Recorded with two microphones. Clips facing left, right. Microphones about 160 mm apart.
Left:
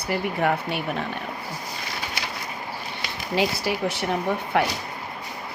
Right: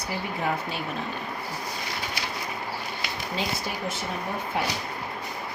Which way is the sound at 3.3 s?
75° left (ahead or behind).